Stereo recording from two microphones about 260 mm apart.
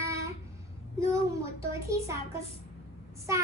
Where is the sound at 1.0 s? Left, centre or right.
Centre.